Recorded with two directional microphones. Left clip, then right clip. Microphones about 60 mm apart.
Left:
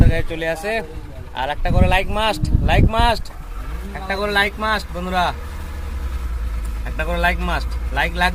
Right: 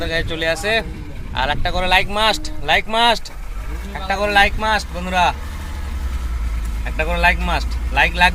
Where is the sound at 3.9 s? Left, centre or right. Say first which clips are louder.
Right 3 dB; left.